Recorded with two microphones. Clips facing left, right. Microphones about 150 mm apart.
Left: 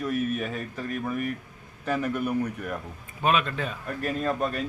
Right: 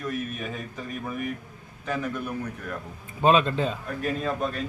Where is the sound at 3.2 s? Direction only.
30° right (ahead or behind).